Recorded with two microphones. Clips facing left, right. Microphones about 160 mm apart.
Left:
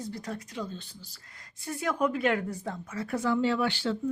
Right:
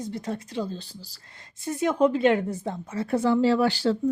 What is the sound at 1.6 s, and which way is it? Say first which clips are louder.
A woman's voice: right 7 dB; 20° right (ahead or behind).